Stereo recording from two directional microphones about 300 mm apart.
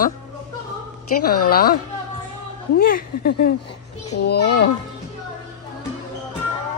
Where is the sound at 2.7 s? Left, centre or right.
Left.